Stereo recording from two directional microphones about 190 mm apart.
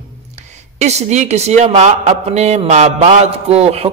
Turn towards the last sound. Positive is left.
turn(degrees=-35)  # may be behind; listen again after turning